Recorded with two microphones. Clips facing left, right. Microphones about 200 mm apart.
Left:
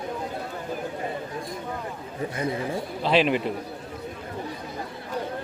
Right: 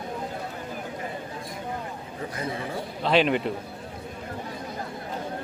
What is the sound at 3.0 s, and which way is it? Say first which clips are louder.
Speech: even; centre (ahead or behind).